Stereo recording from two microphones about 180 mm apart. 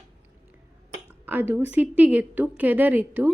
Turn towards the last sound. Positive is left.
turn(degrees=-10)  # may be behind; listen again after turning